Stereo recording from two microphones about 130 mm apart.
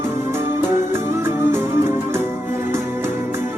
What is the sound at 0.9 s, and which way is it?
Music, 20° right (ahead or behind).